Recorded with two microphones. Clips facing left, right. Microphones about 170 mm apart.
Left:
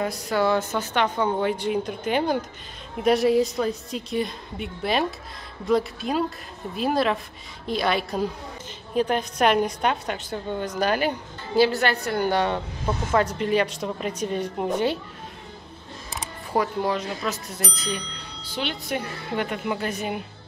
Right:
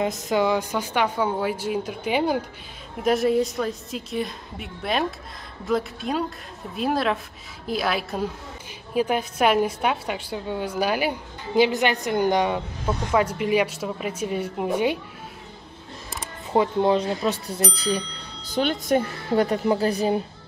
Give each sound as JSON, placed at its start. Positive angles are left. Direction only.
{"t": 0.0, "sound": "a woman's voice", "side_deg": -20}
{"t": 16.5, "sound": "speech", "side_deg": -25}
{"t": 18.5, "sound": "a woman's voice", "side_deg": -45}